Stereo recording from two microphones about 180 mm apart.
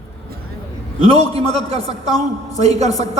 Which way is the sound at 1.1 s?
35° right (ahead or behind).